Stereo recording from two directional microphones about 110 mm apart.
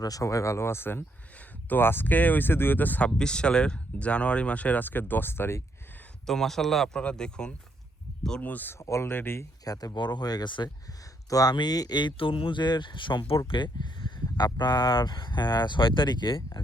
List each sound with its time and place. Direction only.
0.0 s speech: 30° left (ahead or behind)
6.2 s speech: 5° left (ahead or behind)
8.8 s speech: 25° left (ahead or behind)
9.6 s speech: 35° left (ahead or behind)
11.3 s speech: 35° left (ahead or behind)